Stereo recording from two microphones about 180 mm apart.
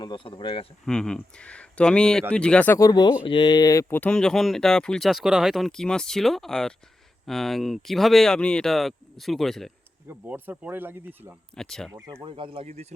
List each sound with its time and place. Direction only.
0.0 s speech: 25° left (ahead or behind)
0.9 s speech: 5° left (ahead or behind)
10.1 s speech: 10° right (ahead or behind)
11.5 s speech: 5° left (ahead or behind)
12.2 s speech: 30° right (ahead or behind)